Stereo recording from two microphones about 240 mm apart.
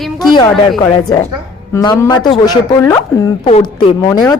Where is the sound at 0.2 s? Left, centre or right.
Centre.